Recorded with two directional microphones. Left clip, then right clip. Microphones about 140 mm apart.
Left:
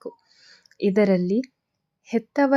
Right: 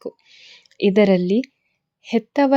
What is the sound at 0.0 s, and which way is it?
Speech, 20° right (ahead or behind).